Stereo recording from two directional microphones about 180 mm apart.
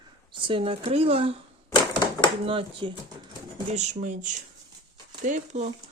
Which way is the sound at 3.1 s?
20° right (ahead or behind).